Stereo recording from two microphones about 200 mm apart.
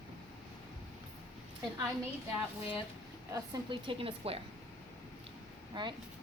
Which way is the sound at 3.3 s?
25° right (ahead or behind).